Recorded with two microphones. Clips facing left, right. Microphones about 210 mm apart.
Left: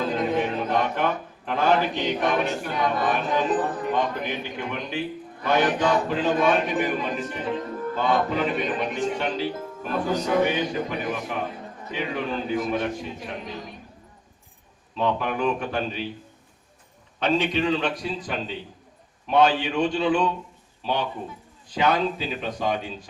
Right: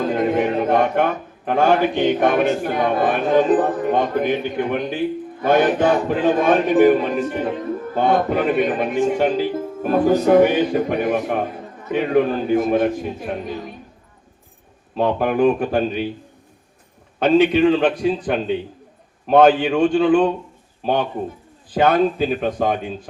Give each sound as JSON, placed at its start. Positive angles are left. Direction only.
{"t": 0.0, "sound": "a capella", "side_deg": -55}
{"t": 1.5, "sound": "a man's voice", "side_deg": -50}
{"t": 14.9, "sound": "a man's voice", "side_deg": -50}
{"t": 17.2, "sound": "a man's voice", "side_deg": -50}